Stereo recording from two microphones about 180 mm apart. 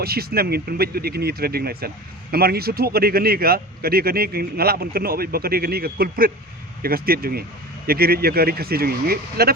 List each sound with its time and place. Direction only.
0.0 s speech: 60° right (ahead or behind)